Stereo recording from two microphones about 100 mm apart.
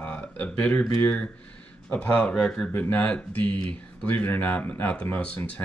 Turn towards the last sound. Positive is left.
turn(degrees=15)  # may be behind; listen again after turning